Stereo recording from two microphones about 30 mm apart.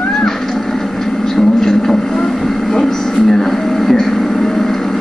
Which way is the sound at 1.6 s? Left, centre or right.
Centre.